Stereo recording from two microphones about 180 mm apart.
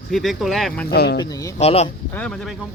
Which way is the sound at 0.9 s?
65° left (ahead or behind).